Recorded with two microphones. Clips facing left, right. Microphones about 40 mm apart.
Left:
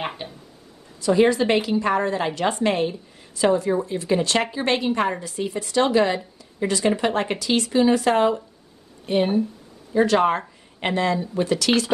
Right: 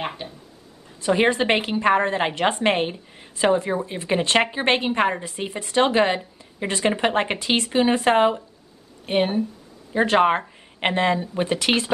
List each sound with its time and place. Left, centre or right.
0.0 s speech: centre
1.0 s a woman's voice: right